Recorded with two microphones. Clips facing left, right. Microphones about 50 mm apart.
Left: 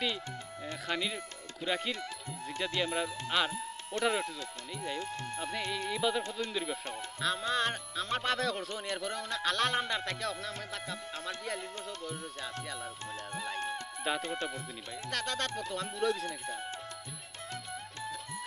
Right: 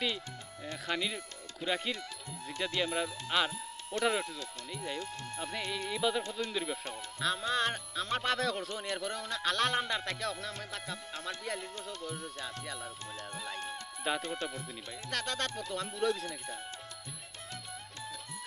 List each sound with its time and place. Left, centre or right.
0.9 s speech: centre
4.9 s speech: left
5.4 s speech: centre
14.1 s speech: centre